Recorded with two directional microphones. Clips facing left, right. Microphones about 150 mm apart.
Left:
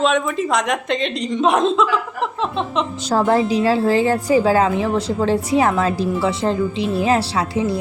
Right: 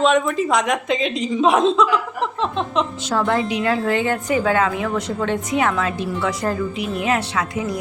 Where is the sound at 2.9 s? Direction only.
35° left (ahead or behind).